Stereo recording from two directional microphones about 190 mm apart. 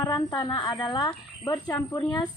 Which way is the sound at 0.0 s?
20° left (ahead or behind).